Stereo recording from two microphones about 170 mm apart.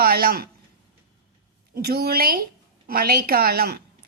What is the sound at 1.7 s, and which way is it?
A woman's voice, 65° right (ahead or behind).